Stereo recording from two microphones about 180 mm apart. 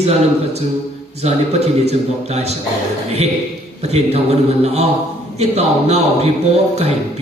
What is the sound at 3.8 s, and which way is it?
Speech, 35° right (ahead or behind).